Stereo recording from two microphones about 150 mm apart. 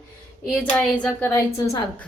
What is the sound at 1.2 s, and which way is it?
Speech, 20° left (ahead or behind).